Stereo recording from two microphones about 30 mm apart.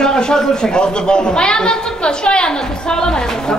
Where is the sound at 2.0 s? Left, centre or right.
Left.